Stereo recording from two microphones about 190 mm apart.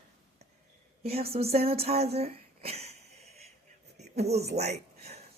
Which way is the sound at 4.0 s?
35° right (ahead or behind).